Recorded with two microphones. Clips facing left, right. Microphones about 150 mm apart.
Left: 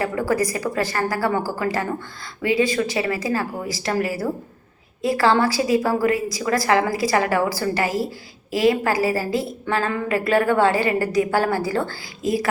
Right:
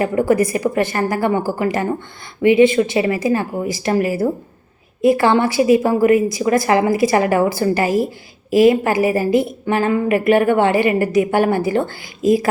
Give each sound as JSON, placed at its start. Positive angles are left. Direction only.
{"t": 0.0, "sound": "a woman's voice", "side_deg": -25}